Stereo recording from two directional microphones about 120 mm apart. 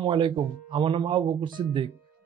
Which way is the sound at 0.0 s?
40° right (ahead or behind).